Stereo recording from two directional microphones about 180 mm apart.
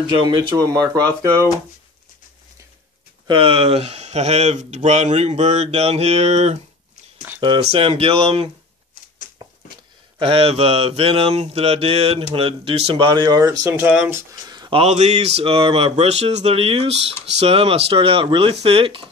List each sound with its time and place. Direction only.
0.0 s speech: 25° right (ahead or behind)
3.3 s mantra: 30° right (ahead or behind)
7.3 s speech: 25° right (ahead or behind)
7.7 s mantra: 30° right (ahead or behind)
10.1 s mantra: 30° right (ahead or behind); by 14.2 s 10° right (ahead or behind)
14.5 s mantra: 25° right (ahead or behind)